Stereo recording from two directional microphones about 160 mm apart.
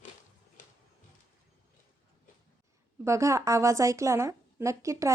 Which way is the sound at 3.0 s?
20° right (ahead or behind).